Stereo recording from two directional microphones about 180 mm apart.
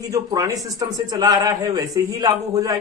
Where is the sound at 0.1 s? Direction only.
20° right (ahead or behind).